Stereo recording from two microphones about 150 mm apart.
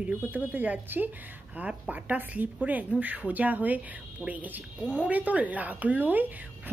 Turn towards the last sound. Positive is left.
turn(degrees=-10)  # may be behind; listen again after turning